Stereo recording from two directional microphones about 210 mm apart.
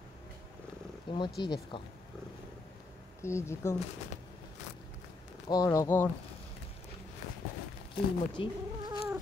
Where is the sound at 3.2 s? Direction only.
15° left (ahead or behind).